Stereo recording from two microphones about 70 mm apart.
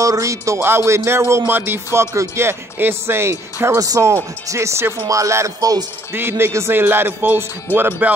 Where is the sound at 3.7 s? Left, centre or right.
Right.